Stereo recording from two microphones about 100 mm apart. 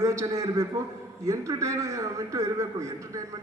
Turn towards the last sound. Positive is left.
turn(degrees=-30)  # may be behind; listen again after turning